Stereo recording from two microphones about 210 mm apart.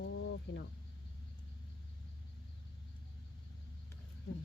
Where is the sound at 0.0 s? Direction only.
60° left (ahead or behind).